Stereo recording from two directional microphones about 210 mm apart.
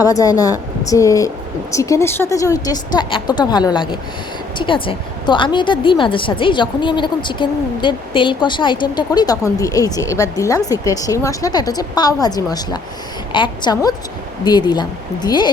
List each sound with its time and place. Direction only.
0.0 s a woman's voice: 15° left (ahead or behind)